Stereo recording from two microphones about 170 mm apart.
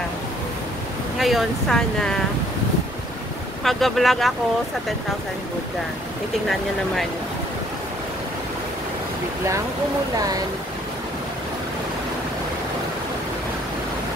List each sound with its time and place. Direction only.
1.1 s speech: centre (ahead or behind)
3.6 s speech: centre (ahead or behind)
10.1 s speech: 20° right (ahead or behind)